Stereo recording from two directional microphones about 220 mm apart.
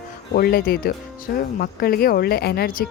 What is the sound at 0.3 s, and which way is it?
Speech, 45° left (ahead or behind).